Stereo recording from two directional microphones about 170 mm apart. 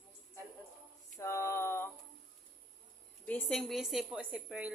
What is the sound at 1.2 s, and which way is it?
Speech, 15° left (ahead or behind).